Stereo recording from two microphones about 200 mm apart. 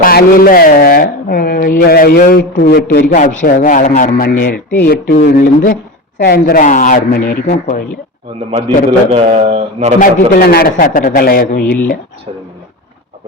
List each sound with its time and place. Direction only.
0.0 s a man's voice: 50° left (ahead or behind)
3.2 s speech: 40° left (ahead or behind)
8.4 s a man's voice: 30° right (ahead or behind)
10.0 s speech: 50° left (ahead or behind)